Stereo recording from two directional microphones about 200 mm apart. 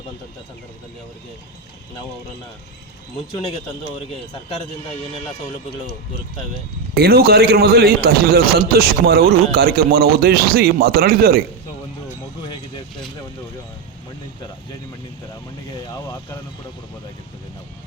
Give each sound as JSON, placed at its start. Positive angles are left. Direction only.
{"t": 6.9, "sound": "a man's voice", "side_deg": -50}
{"t": 12.4, "sound": "vehicle", "side_deg": 20}